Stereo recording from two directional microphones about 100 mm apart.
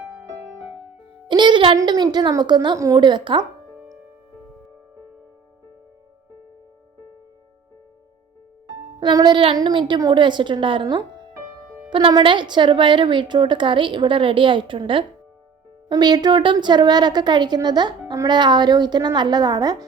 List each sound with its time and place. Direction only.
1.3 s music: 50° right (ahead or behind)
1.8 s a woman's voice: 45° right (ahead or behind)
2.7 s a woman's voice: 30° right (ahead or behind)
3.0 s a woman's voice: 50° right (ahead or behind)
9.1 s a woman's voice: 45° right (ahead or behind)
11.9 s a woman's voice: 50° right (ahead or behind)
15.9 s a woman's voice: 45° right (ahead or behind)
16.4 s a woman's voice: 55° right (ahead or behind)